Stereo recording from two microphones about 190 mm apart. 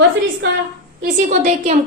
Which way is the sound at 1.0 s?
40° right (ahead or behind).